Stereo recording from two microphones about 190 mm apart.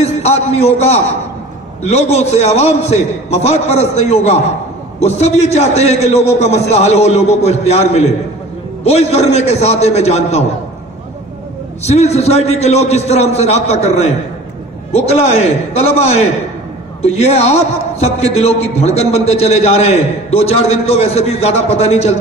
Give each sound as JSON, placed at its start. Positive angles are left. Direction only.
{"t": 0.0, "sound": "a man's voice", "side_deg": 35}
{"t": 11.8, "sound": "a man's voice", "side_deg": 35}